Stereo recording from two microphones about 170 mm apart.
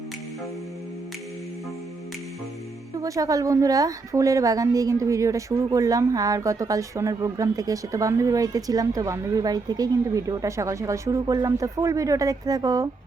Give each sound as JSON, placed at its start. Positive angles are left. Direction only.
{"t": 2.9, "sound": "a woman's voice", "side_deg": -20}